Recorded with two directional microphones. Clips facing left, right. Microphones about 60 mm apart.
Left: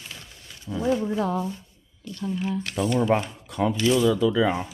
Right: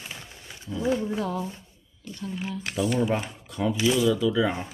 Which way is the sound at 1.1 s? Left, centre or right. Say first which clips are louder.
Left 4 dB; left.